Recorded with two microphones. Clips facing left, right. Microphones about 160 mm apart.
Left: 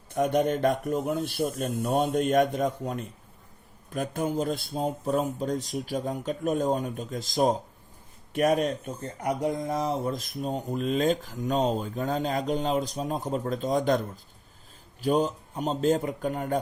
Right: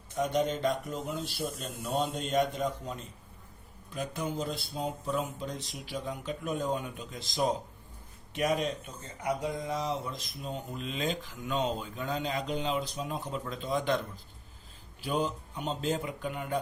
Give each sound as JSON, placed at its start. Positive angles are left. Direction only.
{"t": 0.1, "sound": "a man's voice", "side_deg": 55}
{"t": 15.0, "sound": "speech", "side_deg": 40}